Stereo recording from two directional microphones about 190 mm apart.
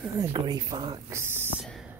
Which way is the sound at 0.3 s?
20° right (ahead or behind).